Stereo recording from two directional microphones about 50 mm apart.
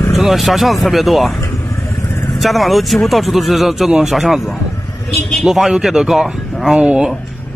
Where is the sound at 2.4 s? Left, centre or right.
Centre.